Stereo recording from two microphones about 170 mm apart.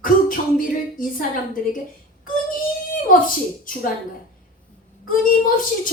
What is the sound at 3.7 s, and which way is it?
Speech, 55° left (ahead or behind).